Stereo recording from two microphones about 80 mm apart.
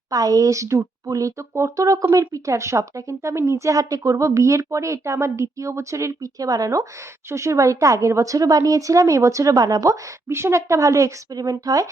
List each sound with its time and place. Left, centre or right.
0.1 s a woman's voice: right